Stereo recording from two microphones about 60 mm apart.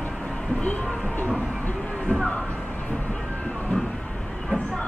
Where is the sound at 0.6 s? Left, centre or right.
Left.